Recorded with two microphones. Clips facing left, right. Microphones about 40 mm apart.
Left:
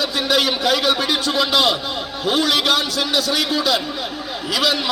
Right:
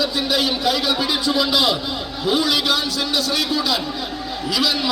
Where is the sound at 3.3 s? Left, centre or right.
Left.